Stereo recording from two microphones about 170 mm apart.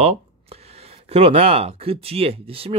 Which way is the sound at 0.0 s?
35° right (ahead or behind).